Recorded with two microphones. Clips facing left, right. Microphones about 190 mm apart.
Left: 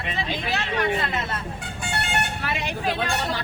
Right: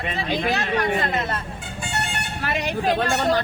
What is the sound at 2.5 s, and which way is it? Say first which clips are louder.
Speech: right 8 dB; 45° right (ahead or behind).